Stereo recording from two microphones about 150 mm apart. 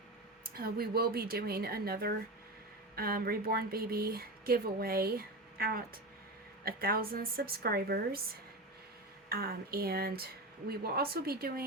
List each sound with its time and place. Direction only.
0.5 s a woman's voice: 90° right
9.3 s speech: 85° right